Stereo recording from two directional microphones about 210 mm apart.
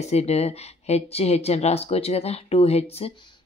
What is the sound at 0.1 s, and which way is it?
Speech, 30° left (ahead or behind).